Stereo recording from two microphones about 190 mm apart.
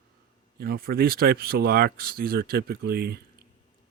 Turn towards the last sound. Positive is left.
turn(degrees=-55)  # may be behind; listen again after turning